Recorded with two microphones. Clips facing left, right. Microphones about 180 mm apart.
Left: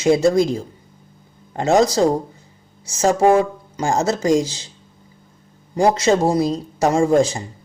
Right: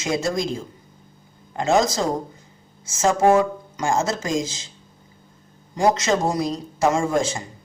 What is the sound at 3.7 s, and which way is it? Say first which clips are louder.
Speech: left 4 dB; 35° left (ahead or behind).